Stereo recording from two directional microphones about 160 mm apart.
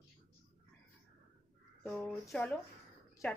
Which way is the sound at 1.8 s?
10° left (ahead or behind).